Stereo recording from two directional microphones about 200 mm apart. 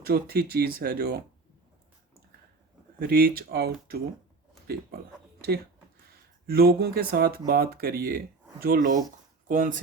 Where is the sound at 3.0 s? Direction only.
50° right (ahead or behind).